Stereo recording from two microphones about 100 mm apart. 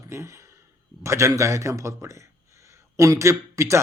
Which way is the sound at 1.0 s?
30° right (ahead or behind).